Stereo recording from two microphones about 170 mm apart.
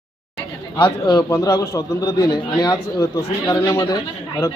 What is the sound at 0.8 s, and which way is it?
A man's voice, 25° left (ahead or behind).